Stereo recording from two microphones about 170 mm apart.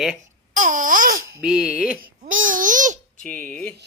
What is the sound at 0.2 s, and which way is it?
Speech, 50° right (ahead or behind).